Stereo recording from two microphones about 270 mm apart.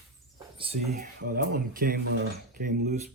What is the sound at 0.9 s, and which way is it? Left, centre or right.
Speech, right.